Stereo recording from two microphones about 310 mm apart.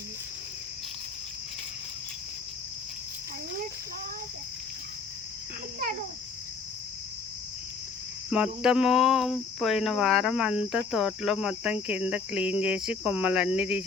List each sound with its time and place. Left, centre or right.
8.3 s cricket: centre